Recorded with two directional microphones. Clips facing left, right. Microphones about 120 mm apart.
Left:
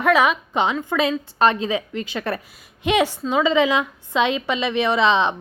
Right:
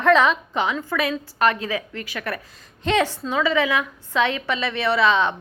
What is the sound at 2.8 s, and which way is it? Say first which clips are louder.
A woman's voice: left 2 dB; 15° left (ahead or behind).